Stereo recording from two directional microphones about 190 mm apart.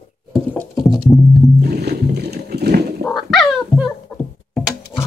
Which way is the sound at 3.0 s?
Centre (ahead or behind).